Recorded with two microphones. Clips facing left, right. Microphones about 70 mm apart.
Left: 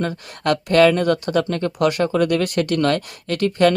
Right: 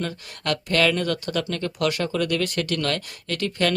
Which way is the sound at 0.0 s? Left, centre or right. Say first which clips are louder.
Left 6 dB; left.